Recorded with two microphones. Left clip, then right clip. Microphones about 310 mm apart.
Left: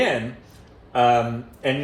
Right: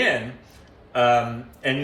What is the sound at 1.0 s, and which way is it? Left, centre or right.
Speech, centre.